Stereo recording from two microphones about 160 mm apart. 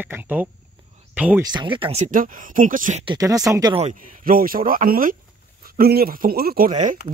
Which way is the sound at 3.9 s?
60° right (ahead or behind).